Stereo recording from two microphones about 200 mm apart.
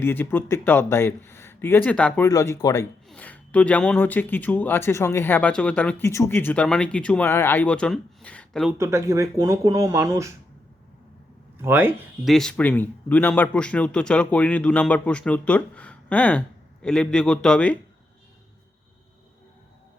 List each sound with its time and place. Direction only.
0.0 s speech: 10° left (ahead or behind)
8.8 s speech: 15° right (ahead or behind)
11.5 s speech: 10° right (ahead or behind)
12.3 s a man's voice: 5° left (ahead or behind)